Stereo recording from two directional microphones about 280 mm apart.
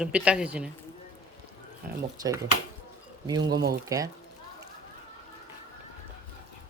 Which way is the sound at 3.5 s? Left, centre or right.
Right.